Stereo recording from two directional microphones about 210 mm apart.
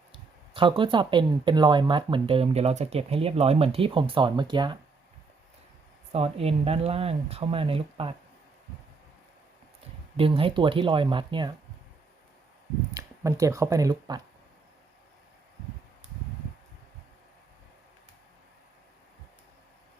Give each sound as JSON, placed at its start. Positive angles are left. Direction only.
{"t": 0.1, "sound": "speech", "side_deg": -25}
{"t": 6.1, "sound": "speech", "side_deg": -30}
{"t": 10.2, "sound": "speech", "side_deg": -25}
{"t": 12.9, "sound": "speech", "side_deg": -15}